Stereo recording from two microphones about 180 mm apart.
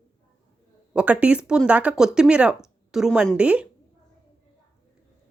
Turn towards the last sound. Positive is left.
turn(degrees=-5)  # may be behind; listen again after turning